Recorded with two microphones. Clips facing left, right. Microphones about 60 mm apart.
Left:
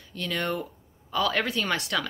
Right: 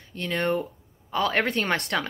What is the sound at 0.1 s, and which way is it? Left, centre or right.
A woman's voice, right.